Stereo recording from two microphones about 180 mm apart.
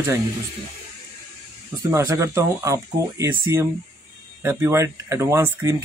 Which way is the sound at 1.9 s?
15° right (ahead or behind).